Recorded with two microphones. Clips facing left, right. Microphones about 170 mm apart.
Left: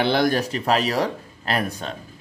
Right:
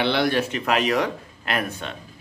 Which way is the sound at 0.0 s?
40° left (ahead or behind).